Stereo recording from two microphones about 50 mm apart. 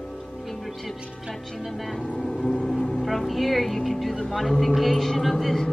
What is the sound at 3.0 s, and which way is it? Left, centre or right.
A man's voice, centre.